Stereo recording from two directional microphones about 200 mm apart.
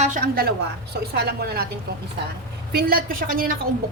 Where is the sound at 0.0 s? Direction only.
45° right (ahead or behind).